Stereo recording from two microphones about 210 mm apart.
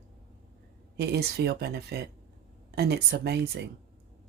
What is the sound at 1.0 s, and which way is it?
Speech, 50° right (ahead or behind).